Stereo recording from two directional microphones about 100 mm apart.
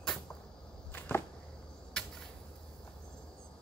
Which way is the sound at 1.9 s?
10° left (ahead or behind).